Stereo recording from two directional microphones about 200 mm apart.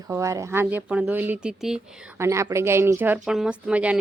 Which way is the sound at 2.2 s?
15° right (ahead or behind).